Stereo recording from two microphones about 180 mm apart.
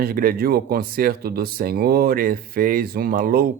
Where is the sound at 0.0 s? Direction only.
55° right (ahead or behind).